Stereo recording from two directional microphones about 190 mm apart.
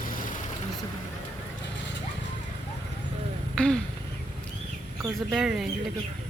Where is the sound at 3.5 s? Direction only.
5° left (ahead or behind).